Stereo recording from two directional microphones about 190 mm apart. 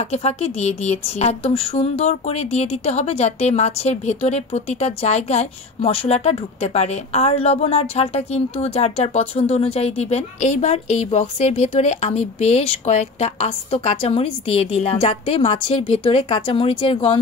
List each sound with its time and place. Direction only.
0.1 s a woman's voice: 35° left (ahead or behind)